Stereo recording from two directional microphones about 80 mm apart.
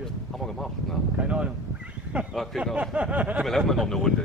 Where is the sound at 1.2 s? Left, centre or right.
Centre.